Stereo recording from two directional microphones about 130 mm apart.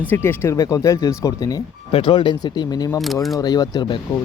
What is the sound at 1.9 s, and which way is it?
Speech, 40° left (ahead or behind).